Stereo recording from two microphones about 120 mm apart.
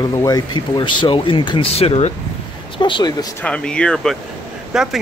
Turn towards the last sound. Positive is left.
turn(degrees=-5)  # may be behind; listen again after turning